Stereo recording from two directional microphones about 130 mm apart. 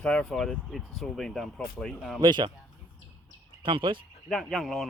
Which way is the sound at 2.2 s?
35° right (ahead or behind).